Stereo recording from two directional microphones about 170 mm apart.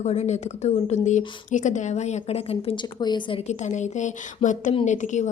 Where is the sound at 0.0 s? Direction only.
40° left (ahead or behind).